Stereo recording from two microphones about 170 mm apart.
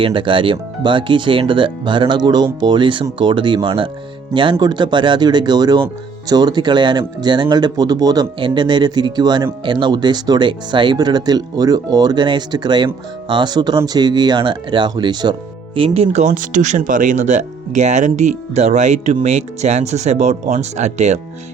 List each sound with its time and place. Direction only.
0.0 s speech: 30° right (ahead or behind)